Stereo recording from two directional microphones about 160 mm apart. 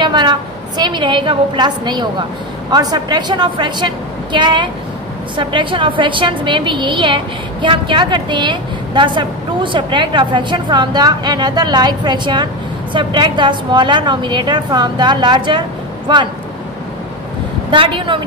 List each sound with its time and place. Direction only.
0.0 s a woman's voice: 25° right (ahead or behind)
17.6 s a woman's voice: 35° right (ahead or behind)